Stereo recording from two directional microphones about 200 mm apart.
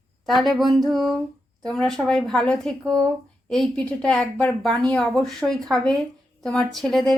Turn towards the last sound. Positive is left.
turn(degrees=0)  # may be behind; listen again after turning